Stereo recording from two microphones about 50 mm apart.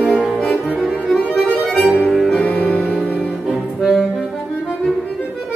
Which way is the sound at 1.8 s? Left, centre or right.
Centre.